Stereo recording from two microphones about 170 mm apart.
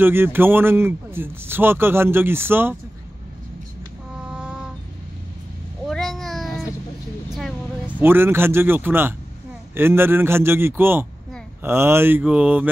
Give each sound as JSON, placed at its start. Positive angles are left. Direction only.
{"t": 0.0, "sound": "speech", "side_deg": -15}
{"t": 5.9, "sound": "a sound", "side_deg": 0}
{"t": 8.0, "sound": "speech", "side_deg": -15}